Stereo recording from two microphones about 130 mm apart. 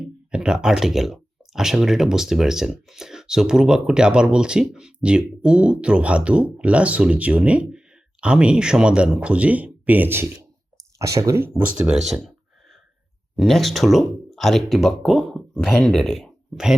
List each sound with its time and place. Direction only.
0.0 s speech: 5° right (ahead or behind)
13.3 s speech: centre (ahead or behind)